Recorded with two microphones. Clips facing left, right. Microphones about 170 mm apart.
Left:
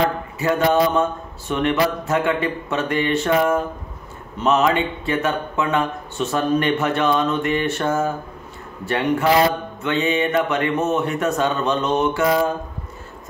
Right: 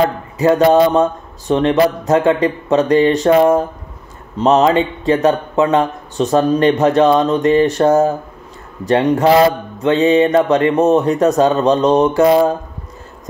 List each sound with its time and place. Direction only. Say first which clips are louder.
0.4 s speech: right 7 dB; 35° right (ahead or behind)